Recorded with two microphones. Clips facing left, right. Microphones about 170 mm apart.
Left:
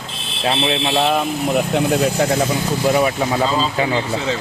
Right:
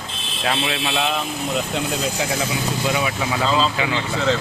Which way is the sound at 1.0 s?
55° left (ahead or behind).